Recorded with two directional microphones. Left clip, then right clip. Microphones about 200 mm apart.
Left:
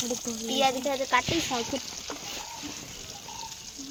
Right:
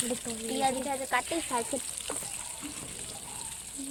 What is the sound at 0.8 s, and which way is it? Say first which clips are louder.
Speech: left 5 dB; 35° left (ahead or behind).